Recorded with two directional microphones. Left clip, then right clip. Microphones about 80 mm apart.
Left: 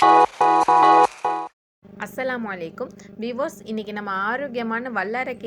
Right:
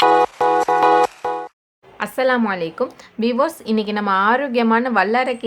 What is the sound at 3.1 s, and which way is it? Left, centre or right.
A woman's voice, left.